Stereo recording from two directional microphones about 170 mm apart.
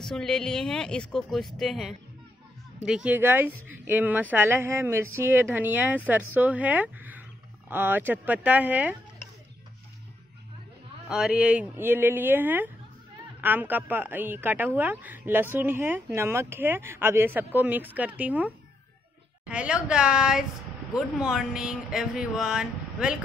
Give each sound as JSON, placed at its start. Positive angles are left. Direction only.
{"t": 0.0, "sound": "speech", "side_deg": 0}
{"t": 11.1, "sound": "speech", "side_deg": -5}